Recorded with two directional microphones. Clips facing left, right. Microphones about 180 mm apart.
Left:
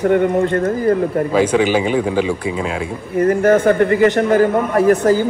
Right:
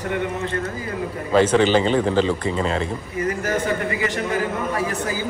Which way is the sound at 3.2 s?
55° left (ahead or behind).